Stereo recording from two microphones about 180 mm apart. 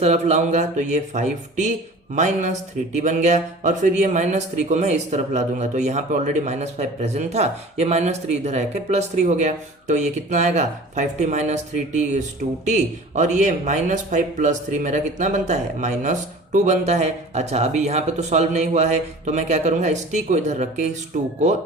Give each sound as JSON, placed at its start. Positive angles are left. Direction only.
{"t": 0.0, "sound": "speech", "side_deg": -40}